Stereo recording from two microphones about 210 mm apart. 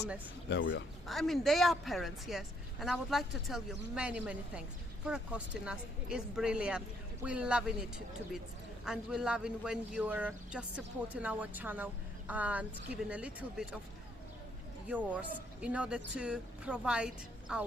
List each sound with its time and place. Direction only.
0.4 s speech: 60° left (ahead or behind)
1.0 s a man's voice: centre (ahead or behind)
14.8 s a man's voice: 5° right (ahead or behind)